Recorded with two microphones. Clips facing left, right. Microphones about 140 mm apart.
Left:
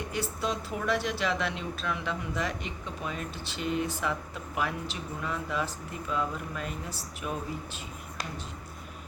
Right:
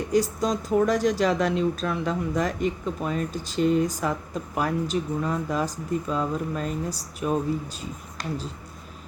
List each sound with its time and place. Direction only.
0.1 s speech: 40° right (ahead or behind)